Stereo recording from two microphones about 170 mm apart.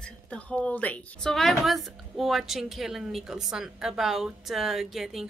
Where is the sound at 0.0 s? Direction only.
5° left (ahead or behind).